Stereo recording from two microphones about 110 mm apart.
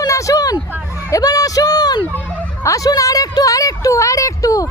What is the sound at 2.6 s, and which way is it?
Speech, 30° left (ahead or behind).